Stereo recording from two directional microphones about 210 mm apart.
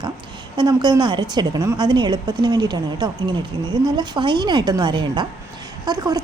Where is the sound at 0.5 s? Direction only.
20° right (ahead or behind).